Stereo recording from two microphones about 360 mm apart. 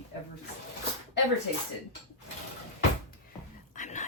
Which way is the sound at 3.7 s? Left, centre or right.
Centre.